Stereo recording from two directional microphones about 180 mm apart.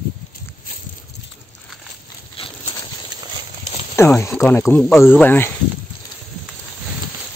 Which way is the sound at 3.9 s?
15° left (ahead or behind).